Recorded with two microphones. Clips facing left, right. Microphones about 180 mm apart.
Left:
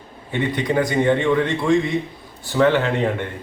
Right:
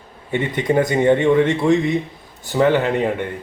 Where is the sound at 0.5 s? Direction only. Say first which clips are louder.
Right 3 dB; 20° right (ahead or behind).